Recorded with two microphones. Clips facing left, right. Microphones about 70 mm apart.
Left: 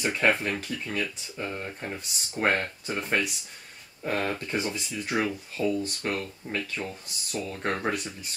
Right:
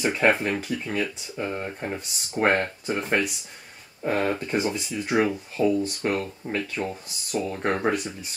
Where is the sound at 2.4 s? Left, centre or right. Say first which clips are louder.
Right 4 dB; centre.